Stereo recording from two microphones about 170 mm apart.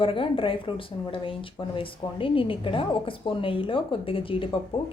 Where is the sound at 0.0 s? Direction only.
30° left (ahead or behind).